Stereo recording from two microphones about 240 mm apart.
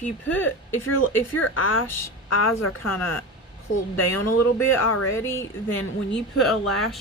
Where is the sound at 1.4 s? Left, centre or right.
Left.